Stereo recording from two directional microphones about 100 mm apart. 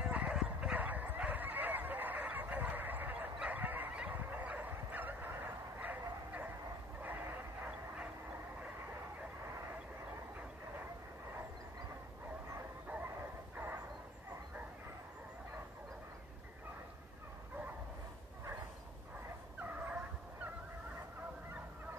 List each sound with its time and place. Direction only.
0.0 s bow-wow: 15° right (ahead or behind)
7.0 s vehicle: 20° right (ahead or behind)
12.8 s a sound: 15° right (ahead or behind)
19.6 s dog: 15° right (ahead or behind)